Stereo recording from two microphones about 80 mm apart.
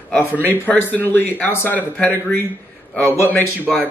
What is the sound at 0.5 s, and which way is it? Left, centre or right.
A man's voice, left.